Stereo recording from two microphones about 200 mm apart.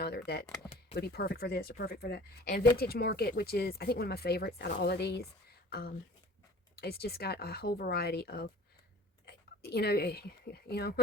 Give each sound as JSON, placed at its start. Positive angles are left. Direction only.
{"t": 0.0, "sound": "a sound", "side_deg": 50}
{"t": 0.9, "sound": "speech", "side_deg": 55}
{"t": 6.7, "sound": "speech", "side_deg": 50}